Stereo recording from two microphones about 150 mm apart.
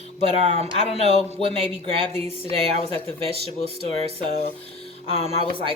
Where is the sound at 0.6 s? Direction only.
40° right (ahead or behind).